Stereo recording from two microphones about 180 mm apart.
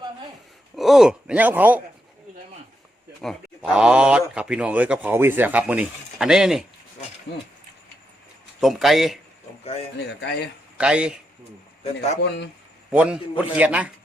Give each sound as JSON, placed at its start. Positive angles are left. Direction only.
{"t": 0.8, "sound": "speech", "side_deg": 0}
{"t": 3.2, "sound": "speech", "side_deg": 0}
{"t": 8.6, "sound": "a man's voice", "side_deg": 0}
{"t": 10.0, "sound": "speech", "side_deg": 70}
{"t": 10.8, "sound": "a man's voice", "side_deg": -5}
{"t": 12.9, "sound": "speech", "side_deg": -5}